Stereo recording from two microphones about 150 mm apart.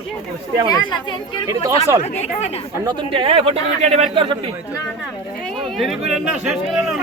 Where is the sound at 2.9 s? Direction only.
35° right (ahead or behind).